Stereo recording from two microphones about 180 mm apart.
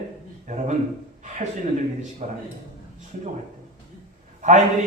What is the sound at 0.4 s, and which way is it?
Speech, 45° right (ahead or behind).